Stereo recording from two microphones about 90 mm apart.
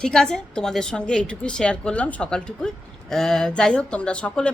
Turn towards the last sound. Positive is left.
turn(degrees=10)  # may be behind; listen again after turning